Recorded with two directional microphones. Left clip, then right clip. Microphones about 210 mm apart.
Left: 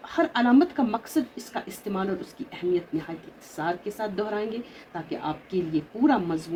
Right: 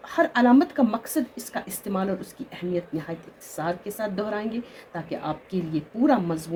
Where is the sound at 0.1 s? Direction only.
55° right (ahead or behind).